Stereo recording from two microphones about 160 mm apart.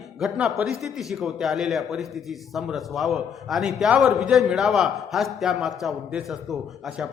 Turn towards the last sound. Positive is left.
turn(degrees=0)  # may be behind; listen again after turning